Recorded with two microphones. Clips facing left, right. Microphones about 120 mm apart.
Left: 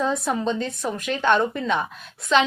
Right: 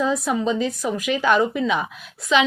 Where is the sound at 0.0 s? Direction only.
Centre (ahead or behind).